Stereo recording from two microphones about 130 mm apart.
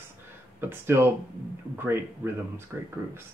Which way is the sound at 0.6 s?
20° right (ahead or behind).